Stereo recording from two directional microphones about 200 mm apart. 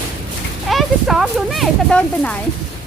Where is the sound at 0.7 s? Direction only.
Centre (ahead or behind).